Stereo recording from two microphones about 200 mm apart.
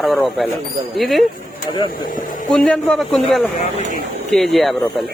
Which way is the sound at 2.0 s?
40° left (ahead or behind).